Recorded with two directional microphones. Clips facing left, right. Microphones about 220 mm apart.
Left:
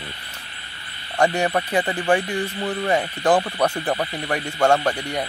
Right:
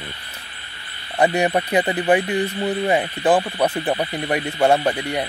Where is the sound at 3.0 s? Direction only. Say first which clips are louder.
Right 1 dB; 5° right (ahead or behind).